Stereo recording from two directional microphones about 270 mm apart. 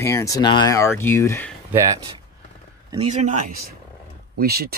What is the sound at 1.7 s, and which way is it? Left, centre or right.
Speech, centre.